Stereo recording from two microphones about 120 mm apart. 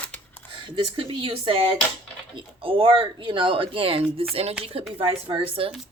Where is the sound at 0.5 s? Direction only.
40° right (ahead or behind).